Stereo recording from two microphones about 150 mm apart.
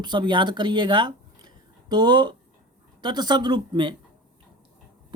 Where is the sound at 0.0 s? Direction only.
30° right (ahead or behind).